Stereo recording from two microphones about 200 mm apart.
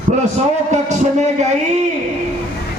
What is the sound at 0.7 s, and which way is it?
Speech, 35° right (ahead or behind).